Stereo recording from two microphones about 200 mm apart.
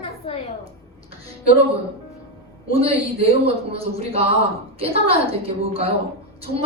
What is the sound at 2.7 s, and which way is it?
A woman's voice, 30° right (ahead or behind).